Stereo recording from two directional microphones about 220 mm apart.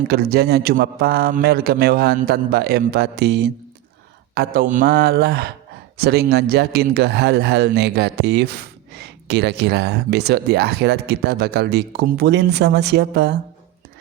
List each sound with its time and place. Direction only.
0.1 s a man's voice: 45° right (ahead or behind)